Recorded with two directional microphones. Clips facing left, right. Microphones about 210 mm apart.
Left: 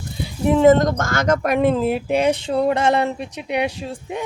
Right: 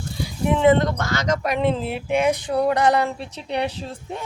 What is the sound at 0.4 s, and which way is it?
Speech, 40° left (ahead or behind).